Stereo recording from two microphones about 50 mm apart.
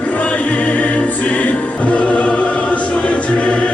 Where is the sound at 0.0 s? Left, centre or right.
Left.